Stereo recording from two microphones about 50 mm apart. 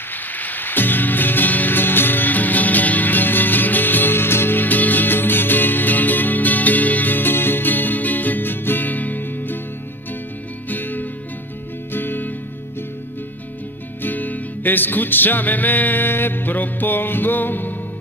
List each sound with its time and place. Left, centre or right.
0.4 s music: left
10.7 s music: left
14.0 s music: left